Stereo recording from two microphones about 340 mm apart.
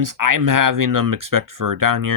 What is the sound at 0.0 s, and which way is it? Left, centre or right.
Speech, right.